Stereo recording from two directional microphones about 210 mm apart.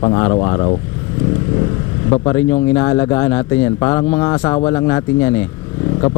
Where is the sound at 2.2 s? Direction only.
20° left (ahead or behind).